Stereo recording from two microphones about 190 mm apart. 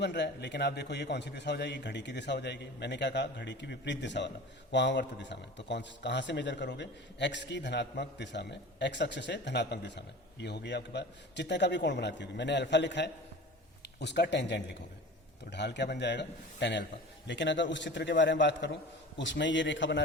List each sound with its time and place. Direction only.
0.0 s a man's voice: 65° left (ahead or behind)